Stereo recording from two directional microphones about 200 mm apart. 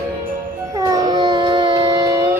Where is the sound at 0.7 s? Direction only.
20° right (ahead or behind).